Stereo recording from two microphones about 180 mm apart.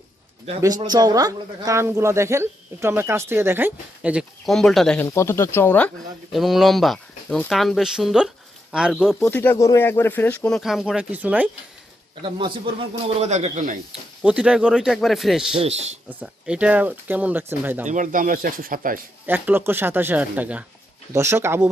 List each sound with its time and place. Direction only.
0.8 s speech: 20° right (ahead or behind); by 5.0 s 5° left (ahead or behind)
5.0 s speech: 15° left (ahead or behind)
6.3 s speech: centre (ahead or behind)
9.2 s speech: 10° left (ahead or behind); by 11.4 s 10° right (ahead or behind)
13.2 s speech: 40° right (ahead or behind)
14.2 s speech: 5° right (ahead or behind)
15.5 s speech: 35° right (ahead or behind)
16.0 s speech: 5° right (ahead or behind)
17.8 s speech: 45° right (ahead or behind)
19.2 s speech: 10° right (ahead or behind)